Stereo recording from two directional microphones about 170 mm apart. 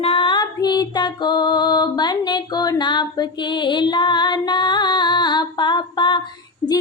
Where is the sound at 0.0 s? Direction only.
30° left (ahead or behind).